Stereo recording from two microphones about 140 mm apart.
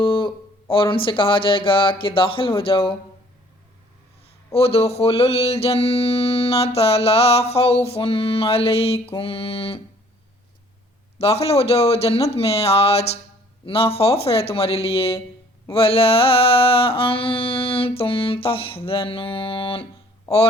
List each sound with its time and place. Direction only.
0.0 s mantra: 35° left (ahead or behind)
4.5 s mantra: 45° left (ahead or behind)
11.2 s mantra: 45° left (ahead or behind)